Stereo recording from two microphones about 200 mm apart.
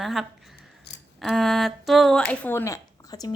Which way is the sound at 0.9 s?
55° left (ahead or behind).